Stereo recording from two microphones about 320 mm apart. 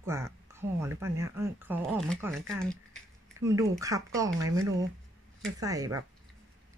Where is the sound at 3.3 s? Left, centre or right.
Centre.